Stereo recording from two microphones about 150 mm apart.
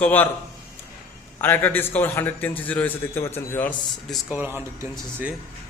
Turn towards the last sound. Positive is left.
turn(degrees=-15)  # may be behind; listen again after turning